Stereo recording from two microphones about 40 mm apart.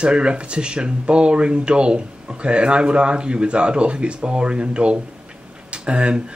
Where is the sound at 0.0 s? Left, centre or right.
Right.